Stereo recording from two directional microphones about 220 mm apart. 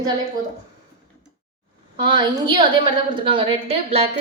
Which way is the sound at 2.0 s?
20° right (ahead or behind).